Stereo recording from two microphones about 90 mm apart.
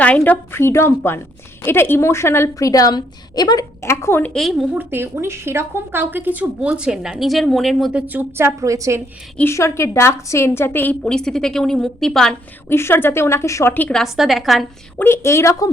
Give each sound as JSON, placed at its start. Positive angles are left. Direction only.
{"t": 0.0, "sound": "a woman's voice", "side_deg": 15}
{"t": 0.5, "sound": "a woman's voice", "side_deg": 30}
{"t": 3.8, "sound": "a woman's voice", "side_deg": 30}
{"t": 4.4, "sound": "a woman's voice", "side_deg": 0}
{"t": 4.7, "sound": "a woman's voice", "side_deg": -25}
{"t": 7.9, "sound": "a woman's voice", "side_deg": -20}
{"t": 9.4, "sound": "a woman's voice", "side_deg": 30}
{"t": 11.0, "sound": "a woman's voice", "side_deg": 10}
{"t": 12.6, "sound": "a woman's voice", "side_deg": 25}
{"t": 13.9, "sound": "a woman's voice", "side_deg": 0}
{"t": 14.9, "sound": "a woman's voice", "side_deg": 25}